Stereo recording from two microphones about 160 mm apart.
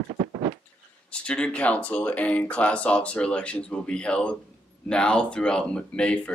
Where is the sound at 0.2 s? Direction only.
40° right (ahead or behind).